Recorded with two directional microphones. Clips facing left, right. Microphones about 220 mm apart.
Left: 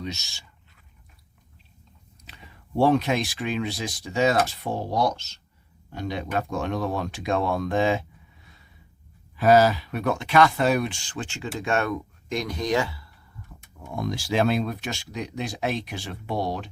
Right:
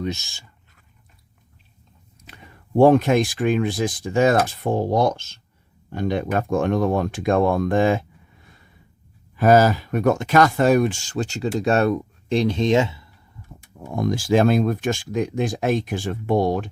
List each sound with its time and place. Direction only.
0.0 s speech: 50° right (ahead or behind)
2.2 s speech: 50° right (ahead or behind); by 13.1 s 20° right (ahead or behind)
13.8 s speech: 45° right (ahead or behind)